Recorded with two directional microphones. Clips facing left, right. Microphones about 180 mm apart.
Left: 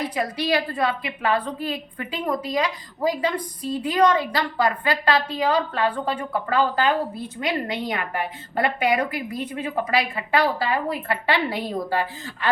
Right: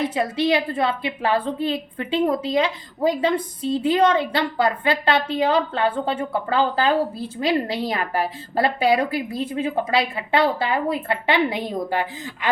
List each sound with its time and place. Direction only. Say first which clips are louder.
0.0 s a woman's voice: right 4 dB; 25° right (ahead or behind)